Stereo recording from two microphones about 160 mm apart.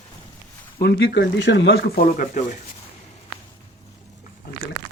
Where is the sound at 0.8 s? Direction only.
90° left.